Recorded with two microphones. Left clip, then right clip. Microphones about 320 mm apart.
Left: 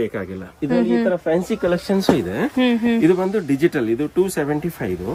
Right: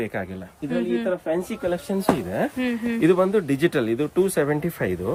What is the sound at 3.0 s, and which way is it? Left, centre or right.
Speech, centre.